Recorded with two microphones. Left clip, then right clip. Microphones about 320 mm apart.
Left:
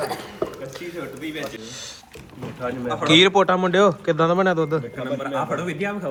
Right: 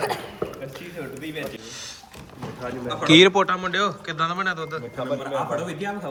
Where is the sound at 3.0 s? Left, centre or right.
Centre.